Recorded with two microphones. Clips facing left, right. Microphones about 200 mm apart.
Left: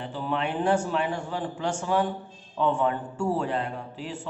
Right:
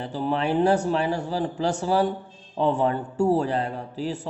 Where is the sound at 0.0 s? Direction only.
40° right (ahead or behind).